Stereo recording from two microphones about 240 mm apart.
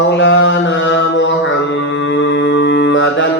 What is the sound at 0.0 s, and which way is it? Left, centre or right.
Mantra, left.